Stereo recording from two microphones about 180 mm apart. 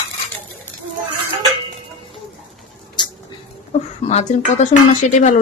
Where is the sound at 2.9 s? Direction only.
25° left (ahead or behind).